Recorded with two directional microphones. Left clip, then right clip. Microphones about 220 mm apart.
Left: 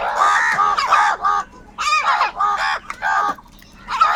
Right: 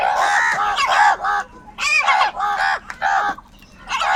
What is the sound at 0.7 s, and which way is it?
Fowl, 30° right (ahead or behind).